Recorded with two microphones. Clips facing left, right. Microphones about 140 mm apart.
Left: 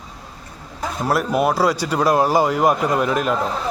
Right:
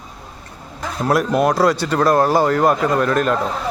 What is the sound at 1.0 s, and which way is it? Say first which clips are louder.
Speech: right 3 dB; 5° left (ahead or behind).